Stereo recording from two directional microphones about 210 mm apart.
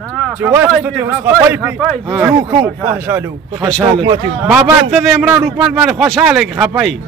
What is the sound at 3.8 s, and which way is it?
Speech, 20° right (ahead or behind).